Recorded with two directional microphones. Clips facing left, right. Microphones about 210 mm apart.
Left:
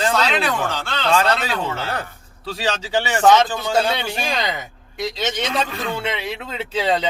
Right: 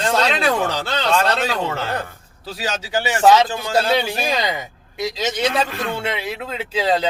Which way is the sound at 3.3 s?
5° right (ahead or behind).